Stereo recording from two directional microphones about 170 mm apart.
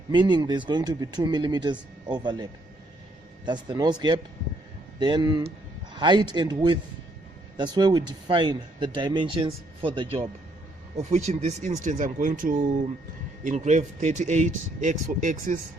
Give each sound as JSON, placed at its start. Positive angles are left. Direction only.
{"t": 0.1, "sound": "speech", "side_deg": -25}